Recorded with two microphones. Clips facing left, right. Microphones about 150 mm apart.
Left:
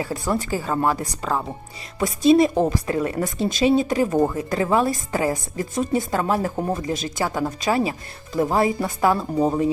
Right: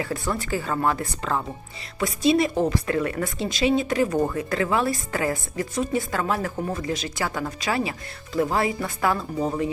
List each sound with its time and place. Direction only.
0.0 s speech: 20° left (ahead or behind)
2.0 s speech: 45° left (ahead or behind)
2.4 s a woman's voice: 20° left (ahead or behind)
3.3 s speech: 45° left (ahead or behind)
3.8 s a woman's voice: 20° left (ahead or behind)